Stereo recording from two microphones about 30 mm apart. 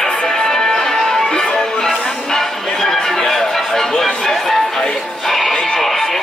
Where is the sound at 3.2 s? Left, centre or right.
Centre.